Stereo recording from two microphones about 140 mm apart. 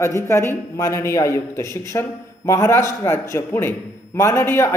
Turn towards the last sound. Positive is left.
turn(degrees=20)  # may be behind; listen again after turning